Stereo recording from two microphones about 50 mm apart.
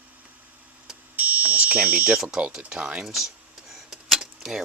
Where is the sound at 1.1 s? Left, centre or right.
Right.